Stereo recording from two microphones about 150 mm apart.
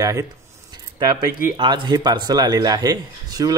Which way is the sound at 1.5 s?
30° right (ahead or behind).